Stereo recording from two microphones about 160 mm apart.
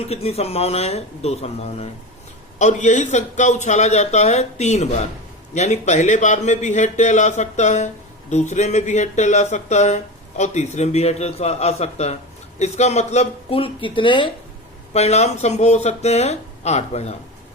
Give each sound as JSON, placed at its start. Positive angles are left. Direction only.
{"t": 0.0, "sound": "speech", "side_deg": 40}
{"t": 14.9, "sound": "speech", "side_deg": 45}